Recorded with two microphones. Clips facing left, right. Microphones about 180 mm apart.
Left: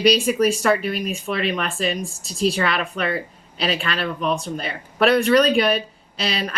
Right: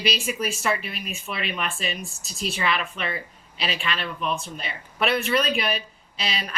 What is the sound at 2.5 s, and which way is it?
A woman's voice, 35° left (ahead or behind).